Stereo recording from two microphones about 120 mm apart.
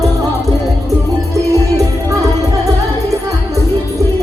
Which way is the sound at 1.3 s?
25° right (ahead or behind).